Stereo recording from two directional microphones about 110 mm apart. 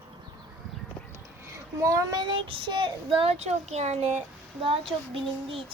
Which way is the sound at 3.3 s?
85° right.